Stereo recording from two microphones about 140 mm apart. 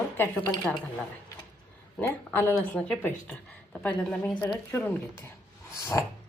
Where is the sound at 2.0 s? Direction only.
15° left (ahead or behind).